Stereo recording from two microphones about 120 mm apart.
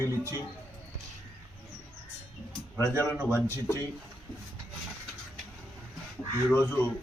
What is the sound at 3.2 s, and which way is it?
Speech, 20° left (ahead or behind).